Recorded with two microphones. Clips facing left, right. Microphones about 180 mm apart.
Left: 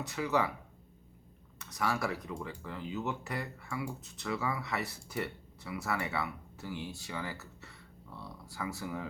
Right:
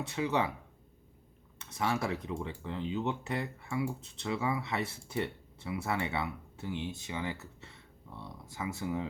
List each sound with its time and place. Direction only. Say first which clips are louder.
0.0 s speech: even; 25° right (ahead or behind)
1.5 s speech: right 1 dB; 25° right (ahead or behind)